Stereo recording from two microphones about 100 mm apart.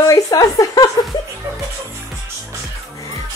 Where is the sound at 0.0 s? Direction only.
40° left (ahead or behind).